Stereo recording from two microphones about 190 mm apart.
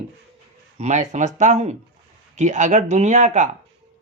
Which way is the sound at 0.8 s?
40° right (ahead or behind).